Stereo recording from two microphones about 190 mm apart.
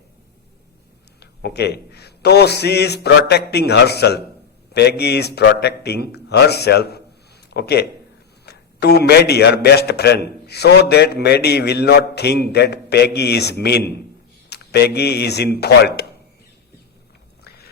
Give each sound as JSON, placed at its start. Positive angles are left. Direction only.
{"t": 1.2, "sound": "a man's voice", "side_deg": 60}